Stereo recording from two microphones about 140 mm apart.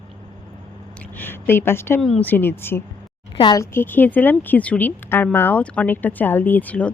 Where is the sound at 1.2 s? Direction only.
15° left (ahead or behind).